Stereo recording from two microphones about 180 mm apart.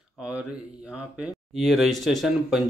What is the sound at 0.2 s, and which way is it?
Speech, 5° right (ahead or behind).